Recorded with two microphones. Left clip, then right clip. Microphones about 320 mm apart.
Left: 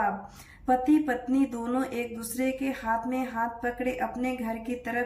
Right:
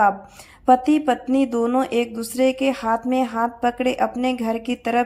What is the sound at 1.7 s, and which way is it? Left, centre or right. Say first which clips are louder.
Speech: right 10 dB; right.